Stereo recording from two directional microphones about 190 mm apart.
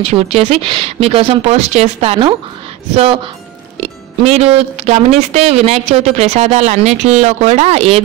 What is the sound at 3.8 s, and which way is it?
A woman's voice, 35° right (ahead or behind).